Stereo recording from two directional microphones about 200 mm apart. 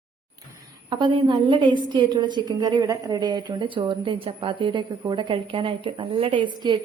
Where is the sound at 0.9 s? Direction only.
25° right (ahead or behind).